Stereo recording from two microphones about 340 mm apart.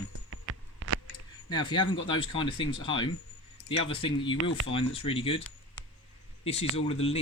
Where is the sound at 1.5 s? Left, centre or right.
Centre.